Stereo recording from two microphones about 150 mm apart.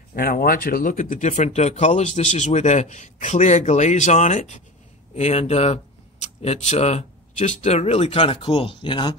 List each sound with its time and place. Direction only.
0.1 s speech: 70° left (ahead or behind); by 9.1 s 30° left (ahead or behind)